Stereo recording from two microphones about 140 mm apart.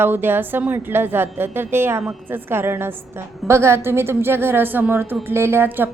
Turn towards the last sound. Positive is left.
turn(degrees=-15)  # may be behind; listen again after turning